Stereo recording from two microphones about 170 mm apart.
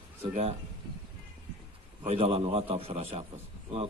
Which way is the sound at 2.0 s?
35° right (ahead or behind).